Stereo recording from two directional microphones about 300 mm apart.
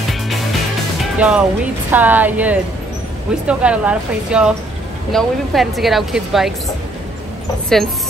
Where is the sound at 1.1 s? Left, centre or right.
Centre.